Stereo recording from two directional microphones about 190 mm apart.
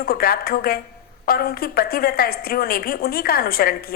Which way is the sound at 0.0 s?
50° left (ahead or behind).